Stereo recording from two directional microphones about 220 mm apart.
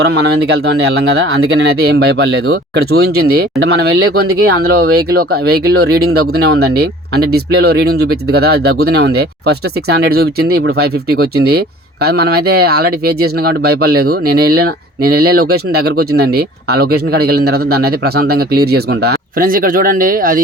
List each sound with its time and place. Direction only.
0.4 s speech: 50° right (ahead or behind)